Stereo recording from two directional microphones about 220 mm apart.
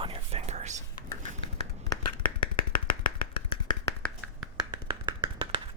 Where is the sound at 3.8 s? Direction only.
5° left (ahead or behind).